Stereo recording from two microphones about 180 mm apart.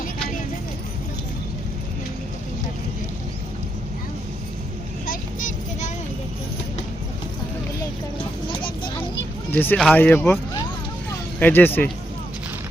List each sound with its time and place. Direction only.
5.0 s vehicle: 45° left (ahead or behind)
9.5 s speech: 10° left (ahead or behind)
11.3 s speech: 10° left (ahead or behind)